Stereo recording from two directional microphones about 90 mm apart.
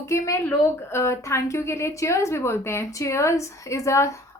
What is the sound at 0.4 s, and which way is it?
A woman's voice, 30° left (ahead or behind).